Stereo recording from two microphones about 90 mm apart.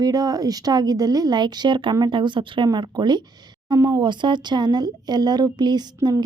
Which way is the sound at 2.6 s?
50° right (ahead or behind).